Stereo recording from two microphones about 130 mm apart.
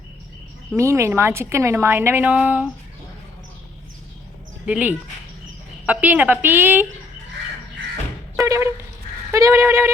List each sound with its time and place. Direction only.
0.8 s a woman's voice: 20° right (ahead or behind)
4.6 s a woman's voice: 10° right (ahead or behind)
8.4 s a sound: 20° right (ahead or behind)
9.3 s a woman's voice: 25° right (ahead or behind)